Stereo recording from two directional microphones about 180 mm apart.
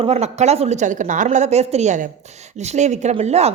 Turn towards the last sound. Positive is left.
turn(degrees=-35)  # may be behind; listen again after turning